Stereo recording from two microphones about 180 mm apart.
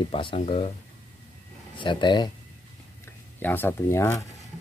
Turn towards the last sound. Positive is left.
turn(degrees=15)  # may be behind; listen again after turning